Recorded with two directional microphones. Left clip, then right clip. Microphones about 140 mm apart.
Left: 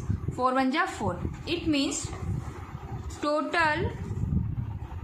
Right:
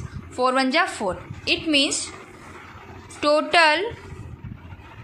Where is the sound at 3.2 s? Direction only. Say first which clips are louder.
Right 9 dB; 25° right (ahead or behind).